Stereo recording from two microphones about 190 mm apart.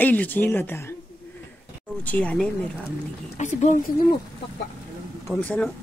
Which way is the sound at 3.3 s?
40° left (ahead or behind).